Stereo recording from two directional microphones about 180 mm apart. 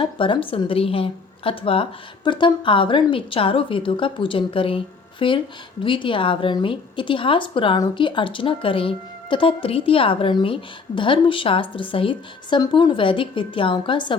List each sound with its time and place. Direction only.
0.0 s a woman's voice: 30° left (ahead or behind)